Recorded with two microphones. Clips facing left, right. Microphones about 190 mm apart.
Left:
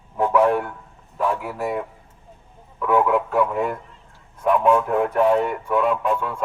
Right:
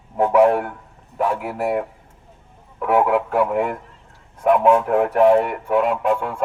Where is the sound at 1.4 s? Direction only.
65° right (ahead or behind).